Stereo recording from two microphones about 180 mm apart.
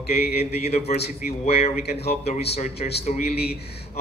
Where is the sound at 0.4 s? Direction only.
35° left (ahead or behind).